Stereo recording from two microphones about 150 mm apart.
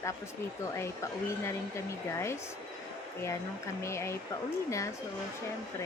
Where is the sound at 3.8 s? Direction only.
20° left (ahead or behind).